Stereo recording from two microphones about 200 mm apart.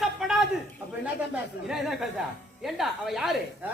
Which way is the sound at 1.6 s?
5° right (ahead or behind).